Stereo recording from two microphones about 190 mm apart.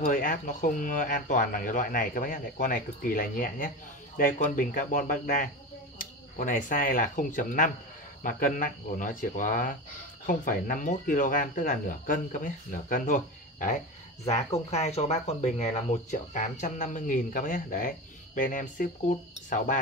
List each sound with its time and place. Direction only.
0.0 s speech: 45° left (ahead or behind)